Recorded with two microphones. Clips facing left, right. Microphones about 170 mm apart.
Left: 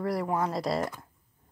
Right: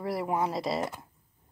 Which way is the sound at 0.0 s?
5° right (ahead or behind).